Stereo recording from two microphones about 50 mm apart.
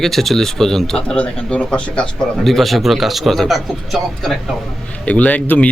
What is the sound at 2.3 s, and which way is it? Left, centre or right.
A man's voice, centre.